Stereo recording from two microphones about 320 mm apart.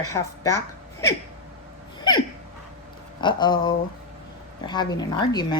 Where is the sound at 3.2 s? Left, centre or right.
Centre.